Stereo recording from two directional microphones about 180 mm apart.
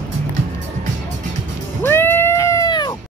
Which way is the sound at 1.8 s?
10° left (ahead or behind).